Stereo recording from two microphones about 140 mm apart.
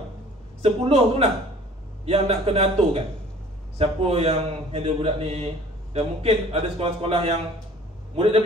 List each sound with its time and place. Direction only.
0.6 s a man's voice: 45° right (ahead or behind)